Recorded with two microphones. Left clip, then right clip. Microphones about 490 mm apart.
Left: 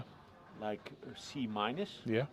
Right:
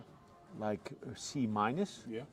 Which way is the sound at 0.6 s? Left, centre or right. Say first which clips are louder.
Right 2 dB; right.